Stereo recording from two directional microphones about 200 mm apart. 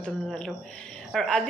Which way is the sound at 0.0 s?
5° left (ahead or behind).